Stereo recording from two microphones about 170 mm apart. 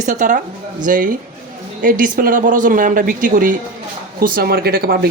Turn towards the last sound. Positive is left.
turn(degrees=-65)  # may be behind; listen again after turning